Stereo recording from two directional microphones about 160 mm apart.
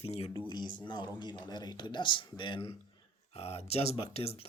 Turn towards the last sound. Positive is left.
turn(degrees=40)  # may be behind; listen again after turning